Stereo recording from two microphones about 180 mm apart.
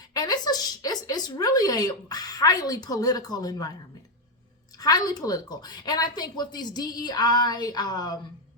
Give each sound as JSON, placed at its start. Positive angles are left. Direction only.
{"t": 0.1, "sound": "speech", "side_deg": 20}
{"t": 4.8, "sound": "a woman's voice", "side_deg": 20}